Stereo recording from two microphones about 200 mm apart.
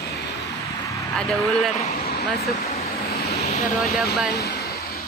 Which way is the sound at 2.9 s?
50° left (ahead or behind).